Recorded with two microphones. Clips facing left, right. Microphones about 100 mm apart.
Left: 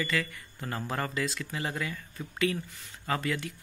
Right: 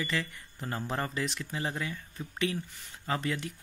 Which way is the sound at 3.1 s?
20° right (ahead or behind).